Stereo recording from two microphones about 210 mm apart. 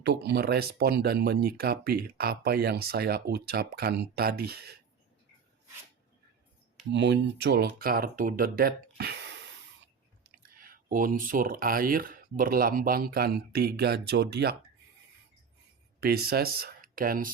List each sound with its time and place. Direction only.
0.0 s speech: 50° right (ahead or behind)
6.9 s speech: 55° right (ahead or behind)
10.4 s speech: 40° right (ahead or behind)
16.0 s speech: 50° right (ahead or behind)